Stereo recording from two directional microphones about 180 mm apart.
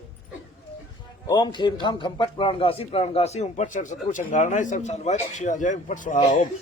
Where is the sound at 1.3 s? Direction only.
25° left (ahead or behind).